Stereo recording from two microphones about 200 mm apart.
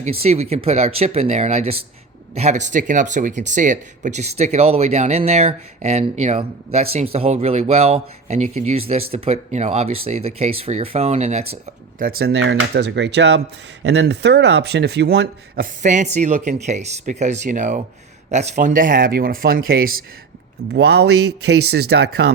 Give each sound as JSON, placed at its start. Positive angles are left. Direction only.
{"t": 0.0, "sound": "speech", "side_deg": -30}
{"t": 11.9, "sound": "speech", "side_deg": -45}
{"t": 15.8, "sound": "speech", "side_deg": -40}
{"t": 20.7, "sound": "speech", "side_deg": -55}